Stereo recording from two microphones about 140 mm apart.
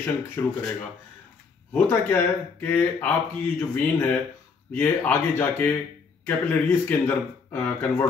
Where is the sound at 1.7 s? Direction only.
15° left (ahead or behind).